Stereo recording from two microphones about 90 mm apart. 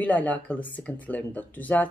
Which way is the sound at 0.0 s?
15° left (ahead or behind).